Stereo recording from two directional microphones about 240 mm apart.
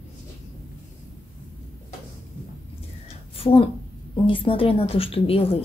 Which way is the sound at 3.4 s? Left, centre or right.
Left.